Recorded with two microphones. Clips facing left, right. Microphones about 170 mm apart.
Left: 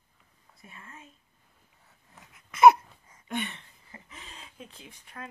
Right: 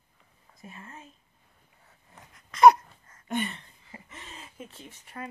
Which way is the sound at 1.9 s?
5° left (ahead or behind).